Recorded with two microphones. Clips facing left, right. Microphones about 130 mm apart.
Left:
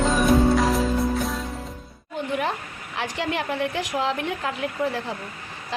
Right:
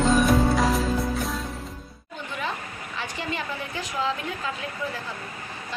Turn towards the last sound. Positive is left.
turn(degrees=60)  # may be behind; listen again after turning